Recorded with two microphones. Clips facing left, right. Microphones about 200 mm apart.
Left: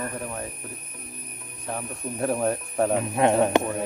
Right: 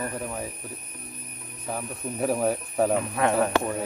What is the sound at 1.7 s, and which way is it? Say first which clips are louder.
Speech: even; 5° right (ahead or behind).